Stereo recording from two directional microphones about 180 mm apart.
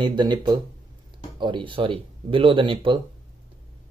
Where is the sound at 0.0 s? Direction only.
25° right (ahead or behind).